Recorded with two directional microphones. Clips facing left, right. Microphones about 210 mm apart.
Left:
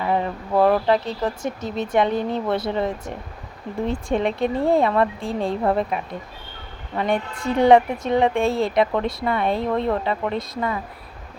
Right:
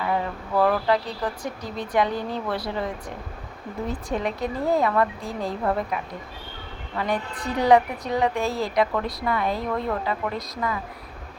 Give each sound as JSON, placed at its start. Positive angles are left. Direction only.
{"t": 0.0, "sound": "speech", "side_deg": 25}